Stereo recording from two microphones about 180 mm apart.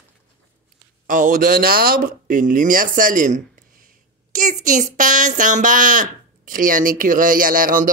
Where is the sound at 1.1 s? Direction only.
50° right (ahead or behind).